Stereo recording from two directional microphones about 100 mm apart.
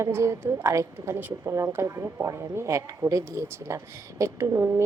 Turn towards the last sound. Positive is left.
turn(degrees=-25)  # may be behind; listen again after turning